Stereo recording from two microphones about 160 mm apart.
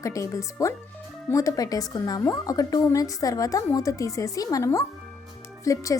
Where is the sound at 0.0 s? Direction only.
20° left (ahead or behind).